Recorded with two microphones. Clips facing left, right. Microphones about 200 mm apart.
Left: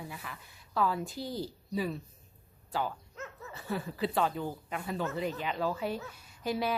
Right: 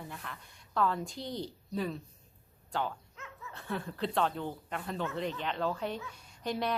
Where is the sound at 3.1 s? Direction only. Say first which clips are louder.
Left 5 dB; 40° left (ahead or behind).